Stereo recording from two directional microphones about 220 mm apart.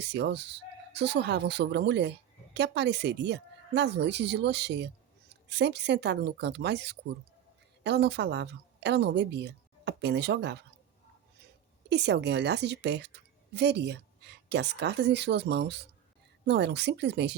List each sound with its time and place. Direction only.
0.0 s a woman's voice: 50° right (ahead or behind)
11.9 s speech: 50° right (ahead or behind)